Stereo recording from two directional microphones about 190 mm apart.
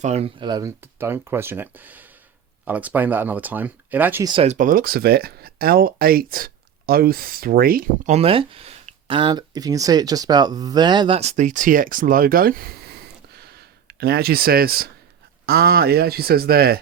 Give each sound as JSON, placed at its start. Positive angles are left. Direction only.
{"t": 0.0, "sound": "speech", "side_deg": -35}
{"t": 4.3, "sound": "speech", "side_deg": -30}
{"t": 4.5, "sound": "speech", "side_deg": -45}
{"t": 8.1, "sound": "speech", "side_deg": -30}
{"t": 13.4, "sound": "a sound", "side_deg": -55}
{"t": 15.4, "sound": "speech", "side_deg": -55}